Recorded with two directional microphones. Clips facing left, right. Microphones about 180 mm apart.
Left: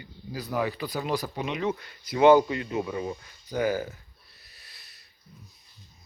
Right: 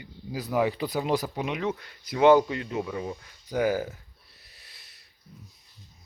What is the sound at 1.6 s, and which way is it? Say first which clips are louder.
Speech: left 1 dB; 5° left (ahead or behind).